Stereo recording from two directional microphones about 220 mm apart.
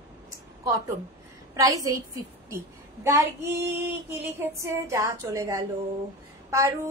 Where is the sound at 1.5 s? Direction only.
15° right (ahead or behind).